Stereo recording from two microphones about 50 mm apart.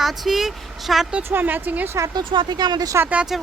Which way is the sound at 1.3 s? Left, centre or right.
Right.